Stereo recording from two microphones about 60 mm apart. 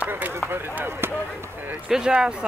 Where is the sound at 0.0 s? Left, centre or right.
Right.